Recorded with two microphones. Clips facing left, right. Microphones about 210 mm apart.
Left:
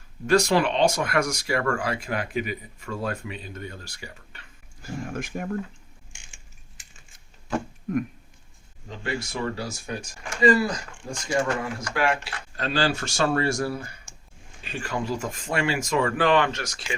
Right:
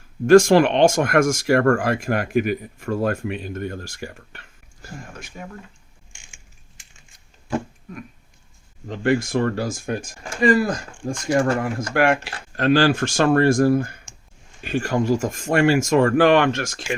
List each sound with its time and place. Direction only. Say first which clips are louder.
0.3 s speech: right 8 dB; 50° right (ahead or behind)
5.1 s speech: left 7 dB; 50° left (ahead or behind)
8.9 s speech: right 11 dB; 50° right (ahead or behind)